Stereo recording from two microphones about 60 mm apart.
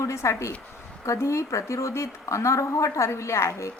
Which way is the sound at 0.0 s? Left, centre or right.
Left.